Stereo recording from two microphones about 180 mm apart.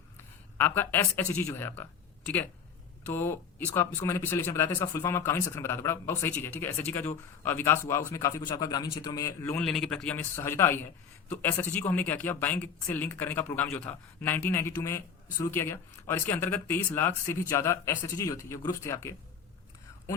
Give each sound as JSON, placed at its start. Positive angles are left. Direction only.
{"t": 0.5, "sound": "speech", "side_deg": 10}